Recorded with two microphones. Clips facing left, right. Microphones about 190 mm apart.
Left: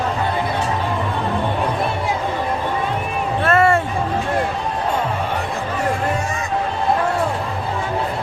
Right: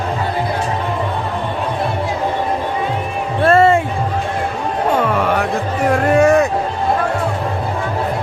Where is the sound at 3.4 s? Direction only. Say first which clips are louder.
Right 5 dB; 30° right (ahead or behind).